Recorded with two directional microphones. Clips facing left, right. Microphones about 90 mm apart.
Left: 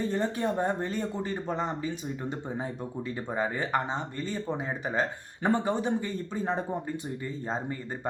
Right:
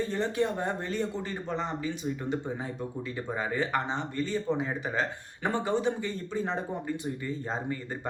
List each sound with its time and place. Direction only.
0.0 s speech: 30° left (ahead or behind)
3.3 s speech: 30° left (ahead or behind)